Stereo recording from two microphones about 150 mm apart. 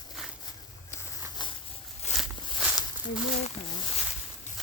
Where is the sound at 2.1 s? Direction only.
50° left (ahead or behind).